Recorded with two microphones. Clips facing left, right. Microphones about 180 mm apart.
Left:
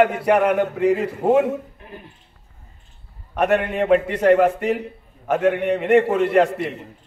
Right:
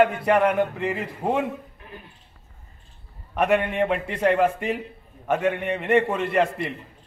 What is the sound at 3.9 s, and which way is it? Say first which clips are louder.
Speech: left 10 dB; 70° left (ahead or behind).